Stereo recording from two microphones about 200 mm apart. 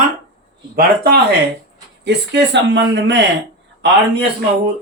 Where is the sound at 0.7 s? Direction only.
50° right (ahead or behind).